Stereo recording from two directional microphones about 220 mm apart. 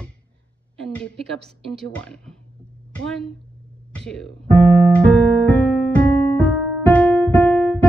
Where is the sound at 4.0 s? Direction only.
Centre (ahead or behind).